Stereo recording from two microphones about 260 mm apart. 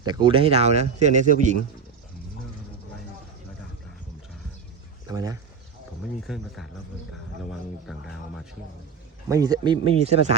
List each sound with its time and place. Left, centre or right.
0.0 s speech: centre
5.0 s speech: centre
6.0 s speech: centre
9.3 s speech: centre